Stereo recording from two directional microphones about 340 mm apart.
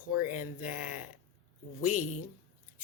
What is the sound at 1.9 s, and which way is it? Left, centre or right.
Speech, left.